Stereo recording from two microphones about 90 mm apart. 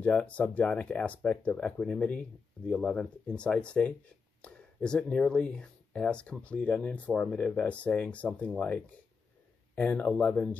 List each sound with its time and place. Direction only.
0.0 s speech: 15° left (ahead or behind)
9.8 s speech: 15° left (ahead or behind)